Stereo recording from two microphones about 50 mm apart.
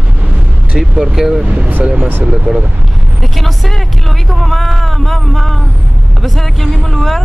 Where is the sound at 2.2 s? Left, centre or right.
Centre.